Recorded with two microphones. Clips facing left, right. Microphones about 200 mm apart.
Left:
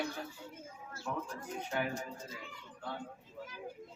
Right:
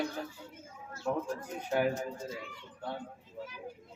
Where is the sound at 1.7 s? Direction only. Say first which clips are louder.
Right 7 dB; 40° right (ahead or behind).